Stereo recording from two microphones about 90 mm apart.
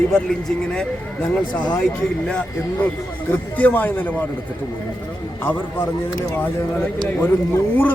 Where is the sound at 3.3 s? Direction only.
20° left (ahead or behind).